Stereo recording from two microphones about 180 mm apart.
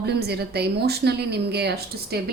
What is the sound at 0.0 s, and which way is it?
Speech, 65° right (ahead or behind).